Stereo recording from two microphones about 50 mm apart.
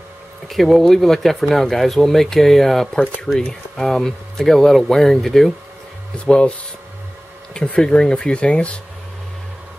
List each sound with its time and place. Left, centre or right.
0.5 s speech: centre
3.3 s speech: centre
3.7 s speech: centre
7.7 s speech: centre